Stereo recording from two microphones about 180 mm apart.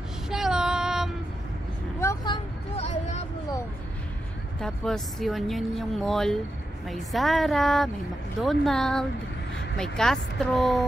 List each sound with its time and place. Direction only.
0.3 s female singing: 5° right (ahead or behind)
2.0 s vehicle: 20° left (ahead or behind)
2.8 s a sound: 40° left (ahead or behind)
4.6 s speech: 5° left (ahead or behind)